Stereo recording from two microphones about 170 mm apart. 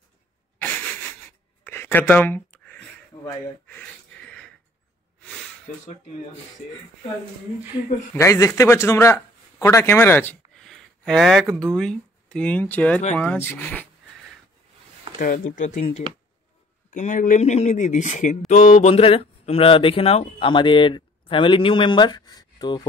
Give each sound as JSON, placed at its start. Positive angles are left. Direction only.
{"t": 0.6, "sound": "wheeze", "side_deg": 10}
{"t": 1.6, "sound": "a sound", "side_deg": 15}
{"t": 3.1, "sound": "gasp", "side_deg": 25}
{"t": 3.6, "sound": "gasp", "side_deg": 10}
{"t": 5.2, "sound": "a sound", "side_deg": 5}
{"t": 8.1, "sound": "speech", "side_deg": 15}
{"t": 10.5, "sound": "a sound", "side_deg": 5}
{"t": 11.6, "sound": "speech", "side_deg": 5}
{"t": 15.1, "sound": "speech", "side_deg": 55}
{"t": 16.9, "sound": "speech", "side_deg": 50}